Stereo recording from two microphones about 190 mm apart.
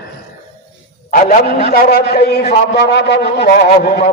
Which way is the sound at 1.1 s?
45° left (ahead or behind).